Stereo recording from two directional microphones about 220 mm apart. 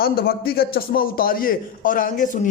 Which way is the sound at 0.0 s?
45° left (ahead or behind).